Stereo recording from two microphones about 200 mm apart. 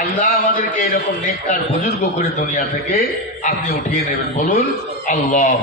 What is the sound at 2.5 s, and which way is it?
A man's voice, 40° left (ahead or behind).